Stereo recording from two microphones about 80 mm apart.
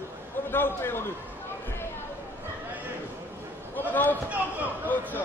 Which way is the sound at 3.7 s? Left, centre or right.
Left.